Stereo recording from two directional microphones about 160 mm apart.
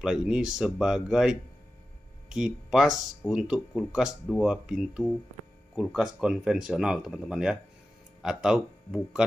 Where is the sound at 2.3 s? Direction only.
5° right (ahead or behind).